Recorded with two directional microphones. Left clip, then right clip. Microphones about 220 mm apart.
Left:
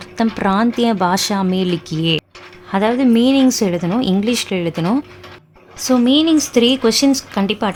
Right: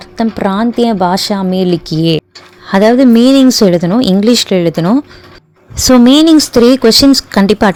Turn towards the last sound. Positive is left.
turn(degrees=-30)  # may be behind; listen again after turning